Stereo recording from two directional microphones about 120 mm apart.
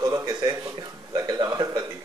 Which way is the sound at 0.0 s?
35° right (ahead or behind).